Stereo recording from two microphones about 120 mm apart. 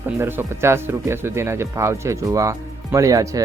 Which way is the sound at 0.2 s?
20° right (ahead or behind).